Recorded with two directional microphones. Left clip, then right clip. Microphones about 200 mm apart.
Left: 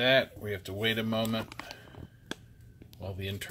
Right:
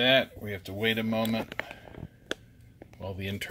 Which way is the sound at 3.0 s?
15° right (ahead or behind).